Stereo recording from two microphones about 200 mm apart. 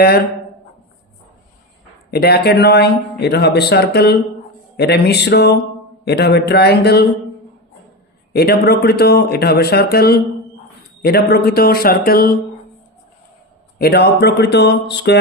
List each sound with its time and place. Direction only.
2.0 s speech: 50° left (ahead or behind)
8.3 s speech: 50° left (ahead or behind)
13.7 s speech: 50° left (ahead or behind)